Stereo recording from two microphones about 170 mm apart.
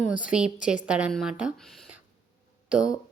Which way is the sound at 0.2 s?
5° right (ahead or behind).